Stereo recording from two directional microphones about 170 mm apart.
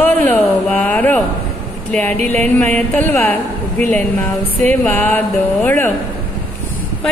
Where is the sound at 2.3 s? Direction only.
10° left (ahead or behind).